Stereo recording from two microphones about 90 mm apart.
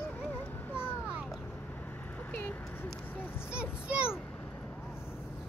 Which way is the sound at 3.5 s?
10° right (ahead or behind).